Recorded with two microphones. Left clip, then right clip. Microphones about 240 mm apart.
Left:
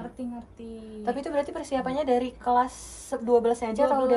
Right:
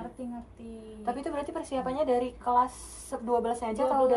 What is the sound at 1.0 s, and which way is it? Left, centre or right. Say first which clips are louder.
A woman's voice: left 5 dB; left.